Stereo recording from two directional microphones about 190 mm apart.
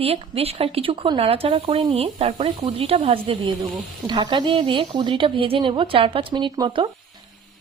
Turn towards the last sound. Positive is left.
turn(degrees=-25)  # may be behind; listen again after turning